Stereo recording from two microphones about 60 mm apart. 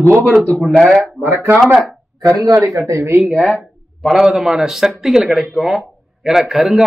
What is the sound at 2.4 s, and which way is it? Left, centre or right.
Speech, right.